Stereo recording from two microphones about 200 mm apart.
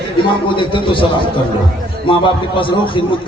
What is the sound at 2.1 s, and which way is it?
Speech, 25° left (ahead or behind).